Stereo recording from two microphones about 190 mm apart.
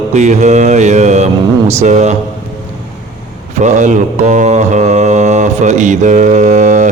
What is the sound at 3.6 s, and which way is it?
Mantra, 40° right (ahead or behind).